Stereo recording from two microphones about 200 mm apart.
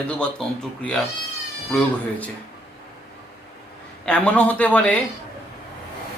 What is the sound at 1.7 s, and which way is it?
Speech, 5° left (ahead or behind).